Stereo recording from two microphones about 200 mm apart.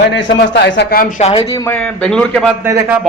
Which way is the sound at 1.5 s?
10° left (ahead or behind).